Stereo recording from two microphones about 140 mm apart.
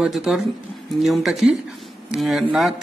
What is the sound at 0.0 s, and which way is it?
A man's voice, centre (ahead or behind).